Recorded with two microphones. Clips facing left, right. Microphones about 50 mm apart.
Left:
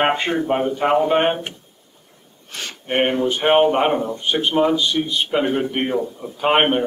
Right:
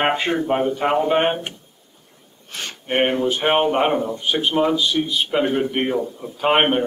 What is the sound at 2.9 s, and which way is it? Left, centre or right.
A man's voice, centre.